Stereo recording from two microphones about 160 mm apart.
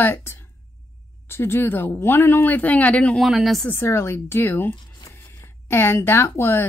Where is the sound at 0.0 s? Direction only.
15° left (ahead or behind).